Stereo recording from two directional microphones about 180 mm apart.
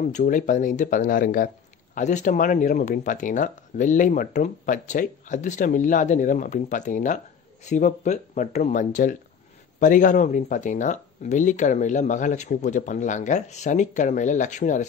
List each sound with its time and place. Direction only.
0.0 s speech: 45° left (ahead or behind)